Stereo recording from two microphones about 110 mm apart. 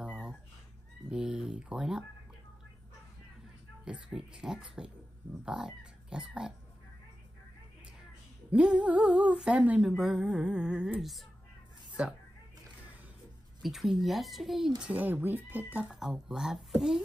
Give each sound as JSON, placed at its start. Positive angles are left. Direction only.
{"t": 0.0, "sound": "a sound", "side_deg": -5}
{"t": 1.1, "sound": "speech", "side_deg": -10}
{"t": 3.8, "sound": "speech", "side_deg": -5}
{"t": 8.5, "sound": "speech", "side_deg": -10}
{"t": 13.6, "sound": "speech", "side_deg": 0}
{"t": 14.8, "sound": "speech", "side_deg": -15}
{"t": 15.9, "sound": "speech", "side_deg": -5}